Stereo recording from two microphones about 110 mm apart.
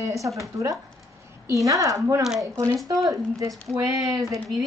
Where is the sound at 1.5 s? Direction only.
30° right (ahead or behind).